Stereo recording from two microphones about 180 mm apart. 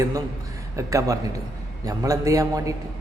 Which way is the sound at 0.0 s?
20° right (ahead or behind).